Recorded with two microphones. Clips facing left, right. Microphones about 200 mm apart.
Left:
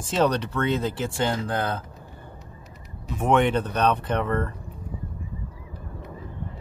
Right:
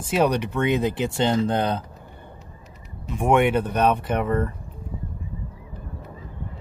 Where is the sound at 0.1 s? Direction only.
10° right (ahead or behind).